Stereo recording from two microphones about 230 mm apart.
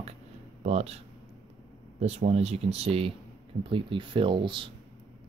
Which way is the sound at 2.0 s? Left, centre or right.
Right.